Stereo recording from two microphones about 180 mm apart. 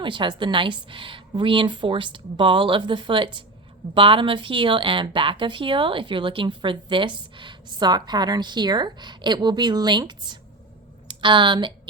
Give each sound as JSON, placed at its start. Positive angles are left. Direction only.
{"t": 0.0, "sound": "speech", "side_deg": -25}